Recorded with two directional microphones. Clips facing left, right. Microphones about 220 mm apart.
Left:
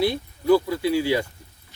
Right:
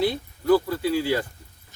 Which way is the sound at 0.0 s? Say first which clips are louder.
Left 1 dB; 10° left (ahead or behind).